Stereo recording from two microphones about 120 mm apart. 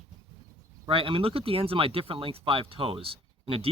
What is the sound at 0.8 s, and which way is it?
Speech, 50° right (ahead or behind).